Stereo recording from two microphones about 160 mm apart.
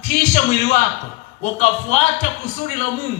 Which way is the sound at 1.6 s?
45° left (ahead or behind).